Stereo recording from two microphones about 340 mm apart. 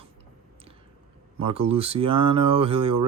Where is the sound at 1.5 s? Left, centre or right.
Centre.